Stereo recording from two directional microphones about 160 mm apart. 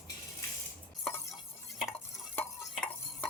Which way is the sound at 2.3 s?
10° left (ahead or behind).